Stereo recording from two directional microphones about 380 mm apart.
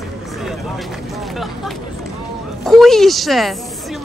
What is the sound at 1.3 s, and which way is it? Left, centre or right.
Vehicle, centre.